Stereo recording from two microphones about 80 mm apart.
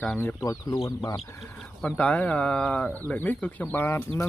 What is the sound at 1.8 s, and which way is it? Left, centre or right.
Speech, centre.